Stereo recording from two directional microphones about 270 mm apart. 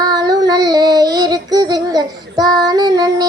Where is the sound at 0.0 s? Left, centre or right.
Centre.